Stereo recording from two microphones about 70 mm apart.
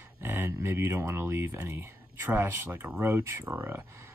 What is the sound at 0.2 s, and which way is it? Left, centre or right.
Speech, right.